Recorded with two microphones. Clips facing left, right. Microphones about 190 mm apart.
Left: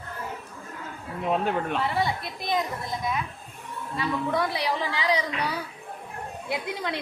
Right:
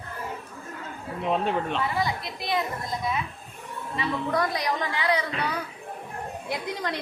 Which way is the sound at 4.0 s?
5° left (ahead or behind).